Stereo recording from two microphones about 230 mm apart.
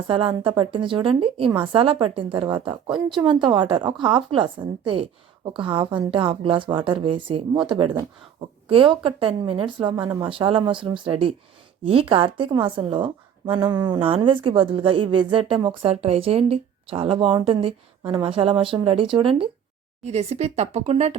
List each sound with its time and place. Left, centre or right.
0.1 s a woman's voice: right